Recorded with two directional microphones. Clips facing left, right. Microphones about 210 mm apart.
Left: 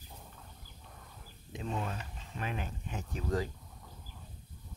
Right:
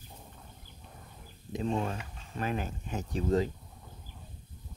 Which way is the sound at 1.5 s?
40° right (ahead or behind).